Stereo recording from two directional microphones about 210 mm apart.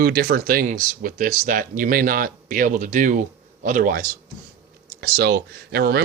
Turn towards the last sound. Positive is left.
turn(degrees=-50)  # may be behind; listen again after turning